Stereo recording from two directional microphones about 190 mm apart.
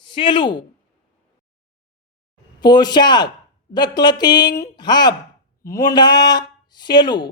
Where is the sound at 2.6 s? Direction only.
20° left (ahead or behind).